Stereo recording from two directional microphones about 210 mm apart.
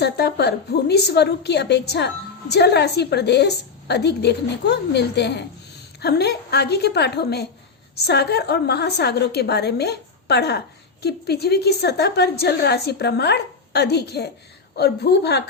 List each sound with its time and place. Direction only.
0.0 s a woman's voice: 50° left (ahead or behind)